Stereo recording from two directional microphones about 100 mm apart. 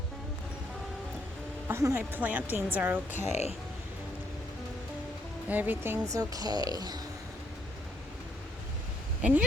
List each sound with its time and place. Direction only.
1.6 s speech: 25° right (ahead or behind)
2.1 s a woman's voice: 15° right (ahead or behind)
5.5 s a woman's voice: 20° right (ahead or behind)
6.1 s speech: 35° right (ahead or behind)
9.2 s a woman's voice: 15° right (ahead or behind)